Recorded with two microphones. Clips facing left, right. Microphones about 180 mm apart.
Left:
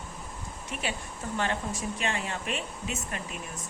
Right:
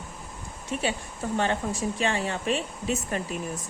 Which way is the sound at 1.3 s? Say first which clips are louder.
Right 4 dB; 30° right (ahead or behind).